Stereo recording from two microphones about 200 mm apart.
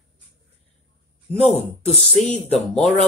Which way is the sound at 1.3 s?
30° right (ahead or behind).